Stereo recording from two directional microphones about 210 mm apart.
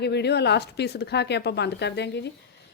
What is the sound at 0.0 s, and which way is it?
A woman's voice, 50° left (ahead or behind).